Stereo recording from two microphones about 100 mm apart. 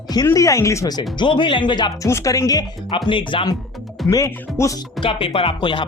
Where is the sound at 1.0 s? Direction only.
50° left (ahead or behind).